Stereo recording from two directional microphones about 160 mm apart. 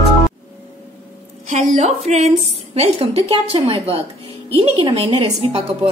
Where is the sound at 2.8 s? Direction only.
35° right (ahead or behind).